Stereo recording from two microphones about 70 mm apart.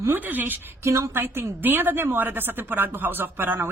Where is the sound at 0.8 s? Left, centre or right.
Right.